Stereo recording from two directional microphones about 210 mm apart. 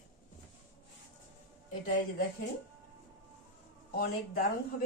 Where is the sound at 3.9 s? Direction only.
45° left (ahead or behind).